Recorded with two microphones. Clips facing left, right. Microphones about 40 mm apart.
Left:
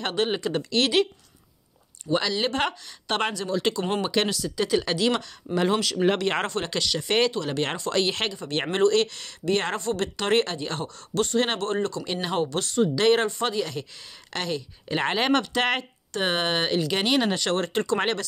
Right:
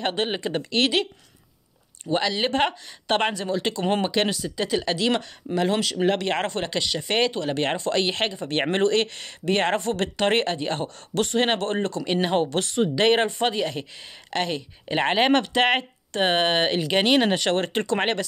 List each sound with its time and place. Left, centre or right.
0.0 s speech: centre
2.0 s speech: centre
6.5 s speech: centre
7.9 s speech: centre
8.4 s speech: right
10.3 s speech: centre
11.1 s speech: right
12.4 s speech: right
12.9 s speech: right